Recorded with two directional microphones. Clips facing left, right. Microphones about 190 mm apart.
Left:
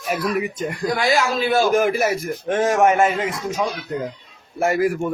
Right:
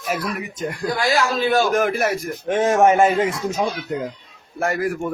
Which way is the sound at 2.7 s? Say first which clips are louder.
Right 2 dB; 30° right (ahead or behind).